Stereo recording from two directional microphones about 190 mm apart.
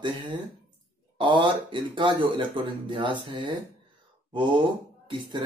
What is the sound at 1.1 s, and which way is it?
Speech, 25° right (ahead or behind).